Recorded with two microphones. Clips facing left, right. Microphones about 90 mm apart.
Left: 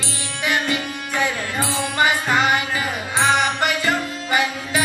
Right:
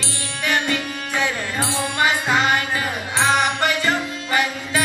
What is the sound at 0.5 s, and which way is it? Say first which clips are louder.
Music: even; 15° left (ahead or behind).